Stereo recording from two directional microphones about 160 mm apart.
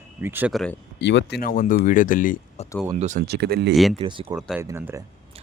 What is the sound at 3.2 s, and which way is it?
Speech, 90° right.